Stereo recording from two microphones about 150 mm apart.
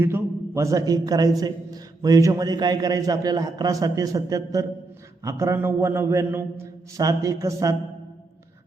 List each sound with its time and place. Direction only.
0.0 s a man's voice: 15° right (ahead or behind)